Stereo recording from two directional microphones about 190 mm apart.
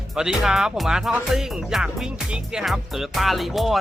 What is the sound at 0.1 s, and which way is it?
Speech, 5° right (ahead or behind).